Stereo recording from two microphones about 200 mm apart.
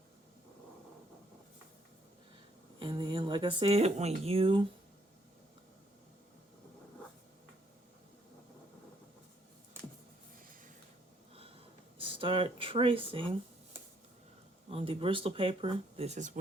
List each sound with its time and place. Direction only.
2.7 s a woman's voice: 25° right (ahead or behind)
11.9 s speech: 25° right (ahead or behind)
14.7 s a woman's voice: 30° right (ahead or behind)